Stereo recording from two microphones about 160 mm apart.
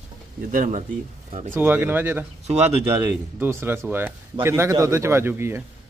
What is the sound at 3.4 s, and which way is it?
A man's voice, 15° right (ahead or behind).